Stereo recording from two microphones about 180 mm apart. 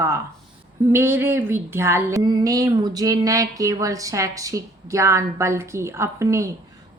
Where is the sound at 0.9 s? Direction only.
15° right (ahead or behind).